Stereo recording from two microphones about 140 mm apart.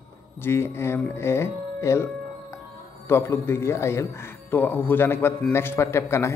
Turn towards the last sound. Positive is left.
turn(degrees=20)  # may be behind; listen again after turning